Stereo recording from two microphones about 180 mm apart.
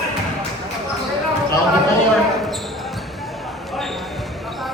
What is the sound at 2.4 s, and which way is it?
Basketball bounce, centre (ahead or behind).